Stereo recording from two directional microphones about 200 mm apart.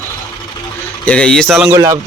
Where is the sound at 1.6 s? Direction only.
15° right (ahead or behind).